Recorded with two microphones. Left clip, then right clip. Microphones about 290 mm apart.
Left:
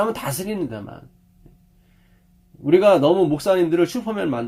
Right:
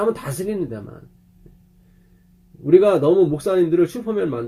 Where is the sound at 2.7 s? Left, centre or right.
Left.